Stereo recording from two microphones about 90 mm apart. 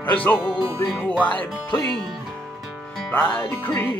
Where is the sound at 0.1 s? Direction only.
20° left (ahead or behind).